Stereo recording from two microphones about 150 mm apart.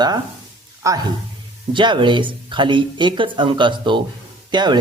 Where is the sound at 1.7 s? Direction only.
30° right (ahead or behind).